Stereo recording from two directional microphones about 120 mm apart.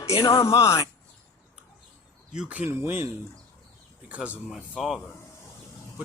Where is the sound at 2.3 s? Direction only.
10° right (ahead or behind).